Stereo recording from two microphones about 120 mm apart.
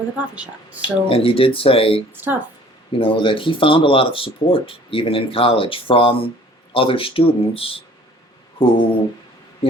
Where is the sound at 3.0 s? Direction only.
45° left (ahead or behind).